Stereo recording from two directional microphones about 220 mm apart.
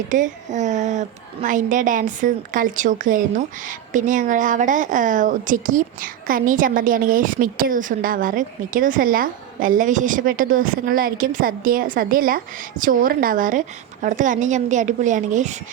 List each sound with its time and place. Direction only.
0.1 s speech: 35° right (ahead or behind)